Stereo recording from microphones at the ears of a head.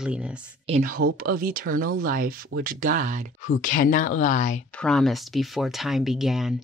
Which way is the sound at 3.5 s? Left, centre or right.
Left.